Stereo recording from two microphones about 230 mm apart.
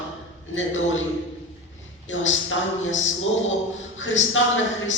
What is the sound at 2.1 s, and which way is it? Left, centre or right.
A man's voice, left.